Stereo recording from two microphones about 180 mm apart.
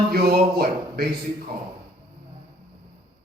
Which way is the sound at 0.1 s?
60° right (ahead or behind).